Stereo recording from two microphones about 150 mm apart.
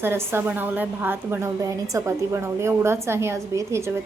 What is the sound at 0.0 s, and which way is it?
A woman's voice, 15° right (ahead or behind).